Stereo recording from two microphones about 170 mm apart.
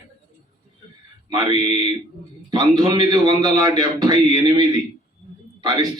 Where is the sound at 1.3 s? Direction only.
25° right (ahead or behind).